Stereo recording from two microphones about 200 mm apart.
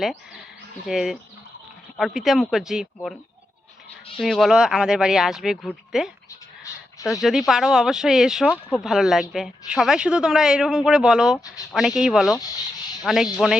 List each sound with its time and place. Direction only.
0.0 s a man's voice: centre (ahead or behind)
4.2 s a man's voice: centre (ahead or behind)